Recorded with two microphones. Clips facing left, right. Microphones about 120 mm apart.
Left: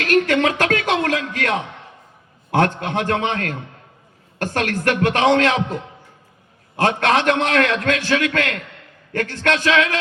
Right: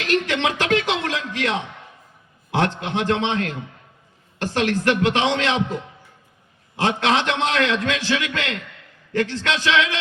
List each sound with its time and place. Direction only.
0.0 s a sound: 50° left (ahead or behind)
2.5 s a man's voice: 50° left (ahead or behind)
6.7 s a man's voice: 50° left (ahead or behind)